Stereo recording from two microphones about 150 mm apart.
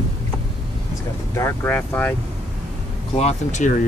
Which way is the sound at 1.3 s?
20° left (ahead or behind).